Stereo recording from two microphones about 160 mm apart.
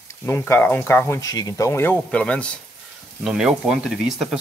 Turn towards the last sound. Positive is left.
turn(degrees=-5)  # may be behind; listen again after turning